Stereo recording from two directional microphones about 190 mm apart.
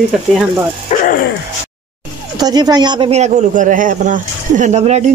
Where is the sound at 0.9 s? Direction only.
35° left (ahead or behind).